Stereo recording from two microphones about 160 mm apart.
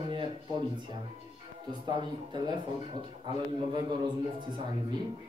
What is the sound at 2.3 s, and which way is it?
A man's voice, 30° right (ahead or behind).